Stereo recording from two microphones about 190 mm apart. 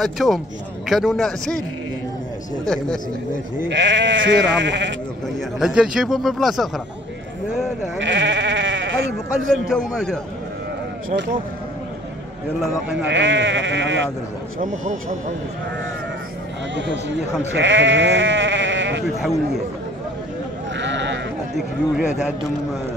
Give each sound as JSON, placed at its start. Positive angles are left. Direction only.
{"t": 0.0, "sound": "speech", "side_deg": 0}
{"t": 3.6, "sound": "speech", "side_deg": -70}
{"t": 5.6, "sound": "speech", "side_deg": 0}
{"t": 8.0, "sound": "sheep", "side_deg": -75}
{"t": 9.9, "sound": "speech", "side_deg": 5}
{"t": 13.0, "sound": "speech", "side_deg": -75}
{"t": 14.6, "sound": "speech", "side_deg": -40}
{"t": 17.6, "sound": "speech", "side_deg": -75}
{"t": 19.0, "sound": "speech", "side_deg": 0}
{"t": 20.7, "sound": "sheep", "side_deg": -70}
{"t": 21.5, "sound": "speech", "side_deg": 0}